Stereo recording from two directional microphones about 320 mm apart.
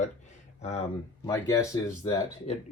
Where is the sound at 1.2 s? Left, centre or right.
Centre.